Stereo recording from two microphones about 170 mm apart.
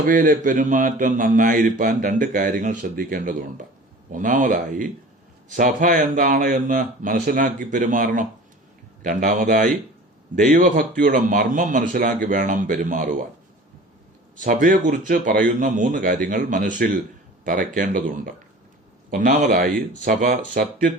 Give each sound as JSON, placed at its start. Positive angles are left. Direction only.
{"t": 0.0, "sound": "a man's voice", "side_deg": -55}
{"t": 14.3, "sound": "a man's voice", "side_deg": -50}
{"t": 19.1, "sound": "speech", "side_deg": -55}